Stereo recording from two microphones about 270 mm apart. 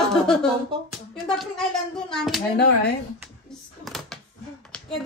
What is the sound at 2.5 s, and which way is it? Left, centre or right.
Speech, left.